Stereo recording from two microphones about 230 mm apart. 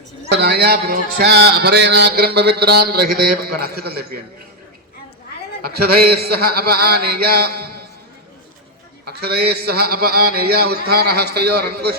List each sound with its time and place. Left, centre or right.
0.3 s a man's voice: right
5.6 s a man's voice: right
9.0 s a man's voice: right